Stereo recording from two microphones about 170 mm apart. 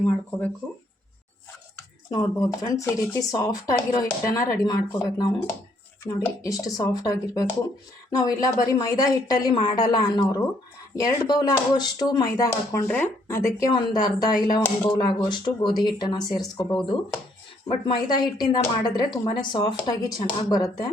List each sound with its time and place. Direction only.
0.0 s speech: 10° left (ahead or behind)
2.6 s speech: 15° left (ahead or behind)